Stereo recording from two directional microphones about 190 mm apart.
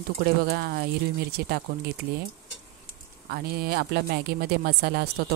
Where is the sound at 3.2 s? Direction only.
50° right (ahead or behind).